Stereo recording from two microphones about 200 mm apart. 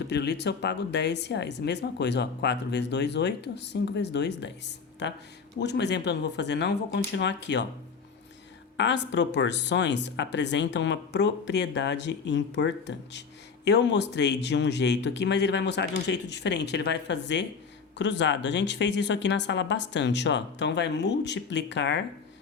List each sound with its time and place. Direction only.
0.1 s speech: 60° left (ahead or behind)
8.8 s speech: 60° left (ahead or behind)